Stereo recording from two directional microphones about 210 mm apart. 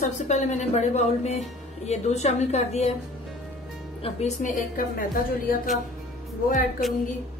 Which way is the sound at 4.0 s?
30° left (ahead or behind).